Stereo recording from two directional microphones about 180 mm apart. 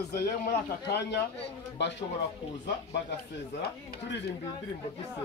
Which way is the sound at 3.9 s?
70° left (ahead or behind).